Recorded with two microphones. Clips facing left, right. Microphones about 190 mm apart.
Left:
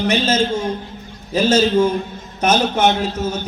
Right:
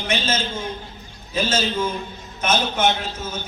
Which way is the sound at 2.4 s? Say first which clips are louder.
Left 5 dB; 40° left (ahead or behind).